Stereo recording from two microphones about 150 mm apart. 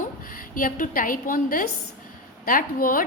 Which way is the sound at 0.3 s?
65° left (ahead or behind).